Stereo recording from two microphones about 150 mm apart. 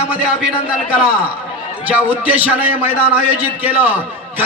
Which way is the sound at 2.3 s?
10° right (ahead or behind).